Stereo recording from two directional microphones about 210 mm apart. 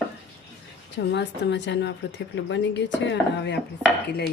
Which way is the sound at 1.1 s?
55° left (ahead or behind).